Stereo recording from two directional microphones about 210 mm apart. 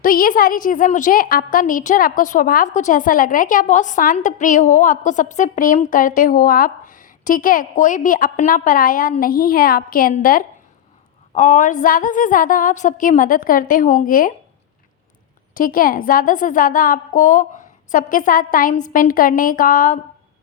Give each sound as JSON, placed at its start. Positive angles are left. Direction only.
{"t": 0.0, "sound": "a woman's voice", "side_deg": 45}
{"t": 15.5, "sound": "a woman's voice", "side_deg": 40}